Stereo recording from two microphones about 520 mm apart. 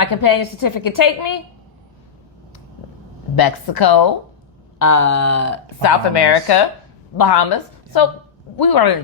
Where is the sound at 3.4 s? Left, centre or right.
Left.